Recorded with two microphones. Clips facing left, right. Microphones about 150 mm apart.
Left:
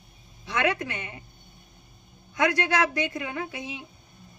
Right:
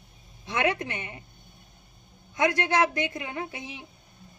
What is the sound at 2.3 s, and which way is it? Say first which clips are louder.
A woman's voice: even; 20° right (ahead or behind).